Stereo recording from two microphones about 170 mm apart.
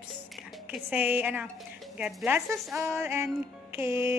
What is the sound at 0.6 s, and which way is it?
A woman's voice, 10° right (ahead or behind).